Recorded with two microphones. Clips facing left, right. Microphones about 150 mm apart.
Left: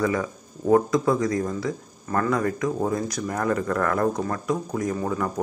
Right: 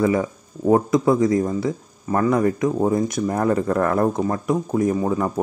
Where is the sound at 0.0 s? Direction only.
25° right (ahead or behind).